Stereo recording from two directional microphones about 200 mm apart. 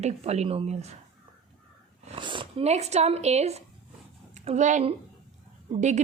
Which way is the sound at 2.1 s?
25° right (ahead or behind).